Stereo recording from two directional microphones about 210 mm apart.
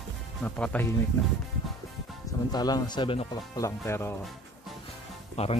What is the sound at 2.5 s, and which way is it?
Speech, 20° left (ahead or behind).